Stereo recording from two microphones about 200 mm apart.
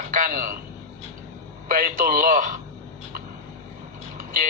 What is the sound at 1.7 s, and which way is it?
Speech, 45° right (ahead or behind).